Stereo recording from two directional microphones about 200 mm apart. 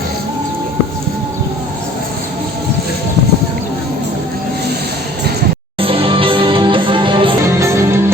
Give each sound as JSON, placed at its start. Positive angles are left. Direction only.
{"t": 5.8, "sound": "music", "side_deg": -25}
{"t": 7.6, "sound": "music", "side_deg": -15}